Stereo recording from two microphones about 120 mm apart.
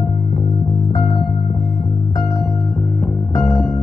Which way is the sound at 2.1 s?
25° left (ahead or behind).